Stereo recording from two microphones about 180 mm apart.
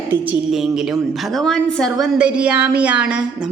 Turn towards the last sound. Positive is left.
turn(degrees=-5)  # may be behind; listen again after turning